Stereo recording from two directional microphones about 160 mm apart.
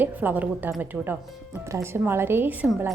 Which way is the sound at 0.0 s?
10° right (ahead or behind).